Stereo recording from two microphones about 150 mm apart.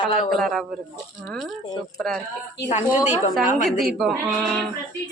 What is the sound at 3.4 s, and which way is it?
Speech, 55° left (ahead or behind).